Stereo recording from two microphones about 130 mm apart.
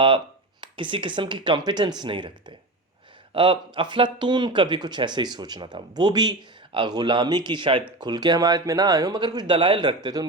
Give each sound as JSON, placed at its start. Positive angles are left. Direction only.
{"t": 0.6, "sound": "speech", "side_deg": -40}